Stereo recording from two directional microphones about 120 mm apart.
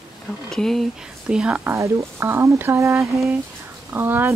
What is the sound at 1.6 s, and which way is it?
Speech, 25° right (ahead or behind).